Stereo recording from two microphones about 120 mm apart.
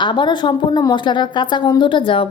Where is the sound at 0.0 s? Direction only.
40° left (ahead or behind).